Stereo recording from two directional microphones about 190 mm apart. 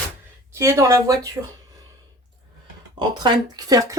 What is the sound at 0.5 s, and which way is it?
Speech, 15° right (ahead or behind).